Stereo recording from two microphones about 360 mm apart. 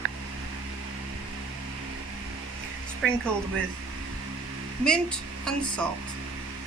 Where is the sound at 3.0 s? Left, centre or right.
Centre.